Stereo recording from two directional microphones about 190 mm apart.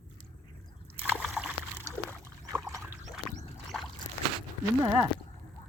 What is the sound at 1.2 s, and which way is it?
Splash, centre (ahead or behind).